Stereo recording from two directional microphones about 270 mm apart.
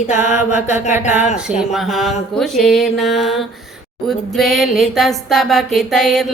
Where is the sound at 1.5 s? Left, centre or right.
Centre.